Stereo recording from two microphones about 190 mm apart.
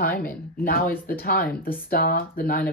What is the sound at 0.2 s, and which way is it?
Speech, 50° left (ahead or behind).